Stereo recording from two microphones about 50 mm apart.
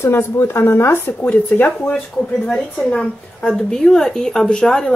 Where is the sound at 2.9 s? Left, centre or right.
Centre.